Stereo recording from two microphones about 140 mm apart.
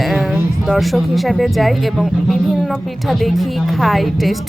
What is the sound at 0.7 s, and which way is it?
A woman's voice, centre (ahead or behind).